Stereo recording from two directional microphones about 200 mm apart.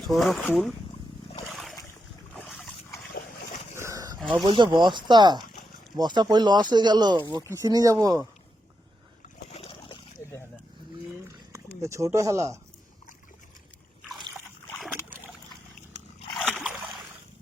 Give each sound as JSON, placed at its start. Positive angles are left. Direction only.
{"t": 0.1, "sound": "speech", "side_deg": 0}
{"t": 1.5, "sound": "boat", "side_deg": 0}
{"t": 2.4, "sound": "dog", "side_deg": 0}
{"t": 3.8, "sound": "boat", "side_deg": -15}
{"t": 4.2, "sound": "speech", "side_deg": 0}
{"t": 4.4, "sound": "speech", "side_deg": -25}
{"t": 9.5, "sound": "a sound", "side_deg": 30}
{"t": 11.1, "sound": "a sound", "side_deg": -15}
{"t": 16.3, "sound": "dog", "side_deg": -5}
{"t": 16.6, "sound": "a sound", "side_deg": 0}